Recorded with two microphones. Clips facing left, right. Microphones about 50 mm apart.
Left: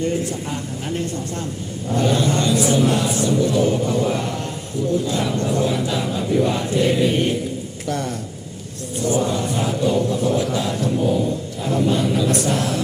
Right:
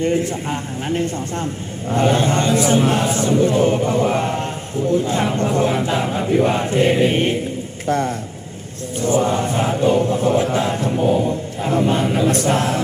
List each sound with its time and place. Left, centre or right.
0.0 s speech: right